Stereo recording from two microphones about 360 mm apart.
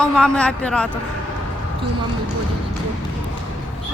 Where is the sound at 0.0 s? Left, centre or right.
Centre.